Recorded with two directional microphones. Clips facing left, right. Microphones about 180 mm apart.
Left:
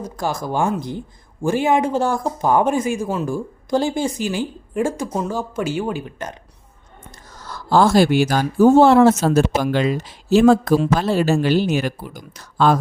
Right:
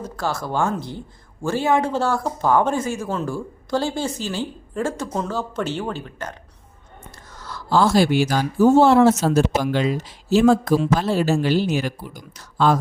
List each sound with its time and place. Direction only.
0.0 s speech: 15° left (ahead or behind)
7.4 s speech: 45° left (ahead or behind)